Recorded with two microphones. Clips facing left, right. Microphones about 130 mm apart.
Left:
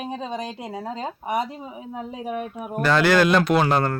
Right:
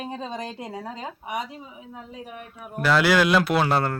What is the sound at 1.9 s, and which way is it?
Speech, 65° left (ahead or behind).